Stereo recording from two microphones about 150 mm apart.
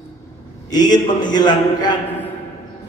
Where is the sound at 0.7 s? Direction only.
25° left (ahead or behind).